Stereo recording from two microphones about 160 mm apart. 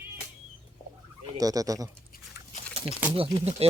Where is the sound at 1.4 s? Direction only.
20° right (ahead or behind).